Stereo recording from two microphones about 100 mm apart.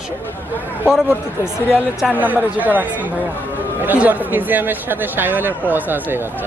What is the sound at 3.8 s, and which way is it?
Speech, 15° right (ahead or behind).